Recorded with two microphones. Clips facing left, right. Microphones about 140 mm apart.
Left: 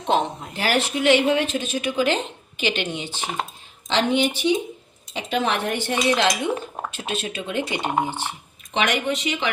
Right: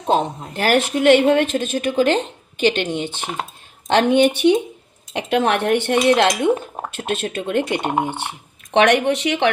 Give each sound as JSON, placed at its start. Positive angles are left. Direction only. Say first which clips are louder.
{"t": 0.5, "sound": "a woman's voice", "louder": "right 6 dB", "side_deg": -50}
{"t": 7.8, "sound": "speech", "louder": "right 2 dB", "side_deg": -15}
{"t": 8.0, "sound": "speech", "louder": "right 2 dB", "side_deg": -60}
{"t": 8.7, "sound": "speech", "louder": "right 8 dB", "side_deg": -70}